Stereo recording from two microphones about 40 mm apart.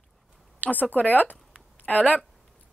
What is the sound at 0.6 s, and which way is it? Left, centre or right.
A woman's voice, left.